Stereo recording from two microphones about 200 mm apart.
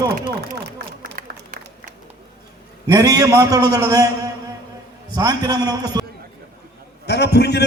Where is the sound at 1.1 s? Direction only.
45° right (ahead or behind).